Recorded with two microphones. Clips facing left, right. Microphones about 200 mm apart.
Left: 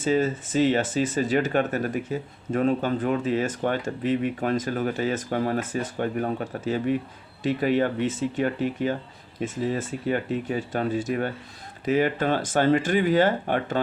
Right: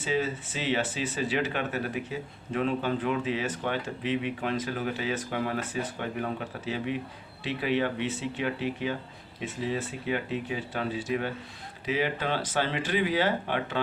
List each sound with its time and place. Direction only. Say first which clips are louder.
0.0 s speech: left 6 dB; 45° left (ahead or behind)